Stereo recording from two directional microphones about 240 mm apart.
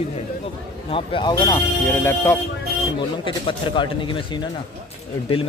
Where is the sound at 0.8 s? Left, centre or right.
Left.